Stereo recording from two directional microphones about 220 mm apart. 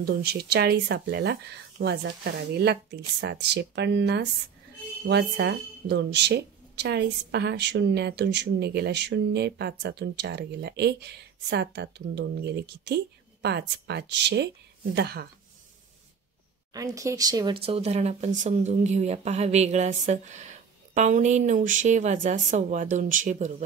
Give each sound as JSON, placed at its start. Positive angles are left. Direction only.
{"t": 0.0, "sound": "speech", "side_deg": -45}
{"t": 16.7, "sound": "speech", "side_deg": -15}